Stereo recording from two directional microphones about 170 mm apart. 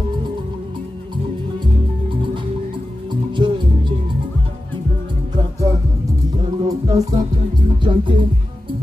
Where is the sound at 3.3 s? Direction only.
30° right (ahead or behind).